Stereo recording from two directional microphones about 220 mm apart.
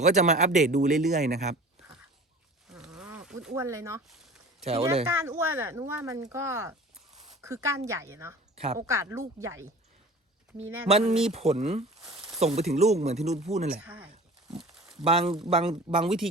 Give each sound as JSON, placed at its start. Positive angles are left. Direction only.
{"t": 0.0, "sound": "speech", "side_deg": -30}
{"t": 2.7, "sound": "a sound", "side_deg": -5}
{"t": 3.5, "sound": "speech", "side_deg": -15}
{"t": 4.6, "sound": "speech", "side_deg": -25}
{"t": 5.0, "sound": "speech", "side_deg": -10}
{"t": 10.8, "sound": "speech", "side_deg": -25}
{"t": 11.9, "sound": "a sound", "side_deg": 0}
{"t": 12.4, "sound": "speech", "side_deg": -30}
{"t": 13.7, "sound": "speech", "side_deg": -5}
{"t": 14.6, "sound": "a sound", "side_deg": 0}
{"t": 15.0, "sound": "speech", "side_deg": -25}